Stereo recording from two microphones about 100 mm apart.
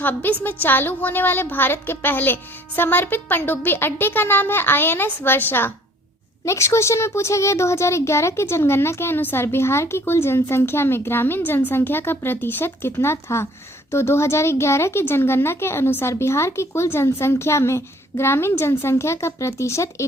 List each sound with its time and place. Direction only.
0.0 s a child's voice: 20° left (ahead or behind)